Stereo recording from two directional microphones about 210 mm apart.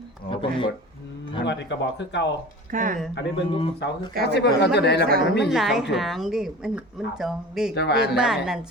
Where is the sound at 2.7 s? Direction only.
40° right (ahead or behind).